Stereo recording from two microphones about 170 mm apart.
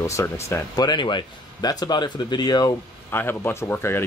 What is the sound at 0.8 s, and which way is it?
Speech, 25° left (ahead or behind).